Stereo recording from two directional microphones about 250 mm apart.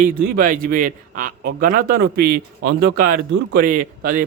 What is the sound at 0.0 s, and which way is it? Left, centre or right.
A man's voice, right.